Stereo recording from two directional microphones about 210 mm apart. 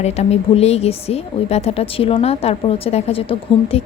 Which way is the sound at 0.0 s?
30° left (ahead or behind).